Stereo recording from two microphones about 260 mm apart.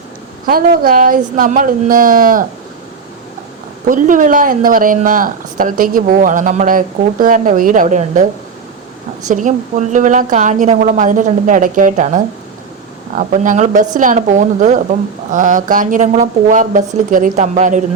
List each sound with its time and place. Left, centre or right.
0.4 s speech: right
3.8 s speech: right
9.2 s a woman's voice: right